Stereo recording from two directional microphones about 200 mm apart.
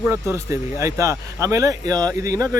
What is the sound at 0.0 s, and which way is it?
Speech, 10° right (ahead or behind).